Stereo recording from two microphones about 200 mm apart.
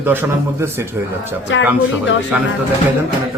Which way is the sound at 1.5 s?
65° left (ahead or behind).